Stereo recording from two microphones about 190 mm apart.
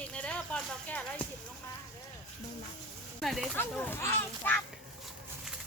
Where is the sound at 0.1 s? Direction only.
5° left (ahead or behind).